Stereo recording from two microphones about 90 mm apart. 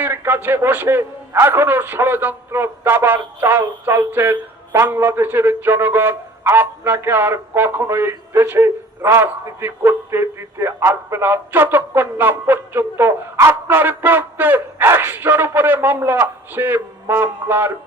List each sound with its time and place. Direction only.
0.0 s a man's voice: 25° right (ahead or behind)